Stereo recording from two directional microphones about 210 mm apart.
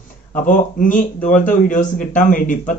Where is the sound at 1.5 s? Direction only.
40° left (ahead or behind).